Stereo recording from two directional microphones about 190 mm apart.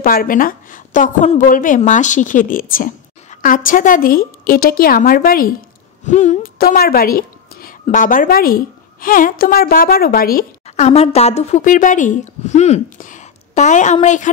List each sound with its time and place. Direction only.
0.0 s a woman's voice: 50° left (ahead or behind)
6.0 s a woman's voice: 40° left (ahead or behind)
10.8 s a woman's voice: 35° left (ahead or behind)